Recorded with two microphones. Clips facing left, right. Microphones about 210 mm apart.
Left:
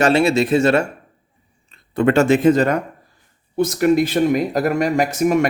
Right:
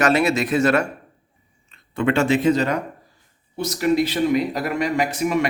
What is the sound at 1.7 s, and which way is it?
Speech, 40° left (ahead or behind).